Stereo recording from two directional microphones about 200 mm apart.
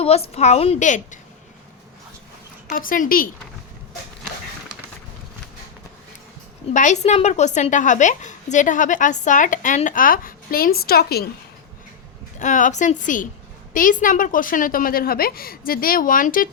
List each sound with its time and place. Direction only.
0.0 s a woman's voice: 30° left (ahead or behind)
2.7 s a woman's voice: 45° left (ahead or behind)
6.7 s a woman's voice: 35° left (ahead or behind)
12.4 s a woman's voice: 40° left (ahead or behind)